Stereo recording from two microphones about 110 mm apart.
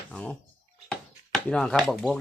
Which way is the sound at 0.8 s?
5° left (ahead or behind).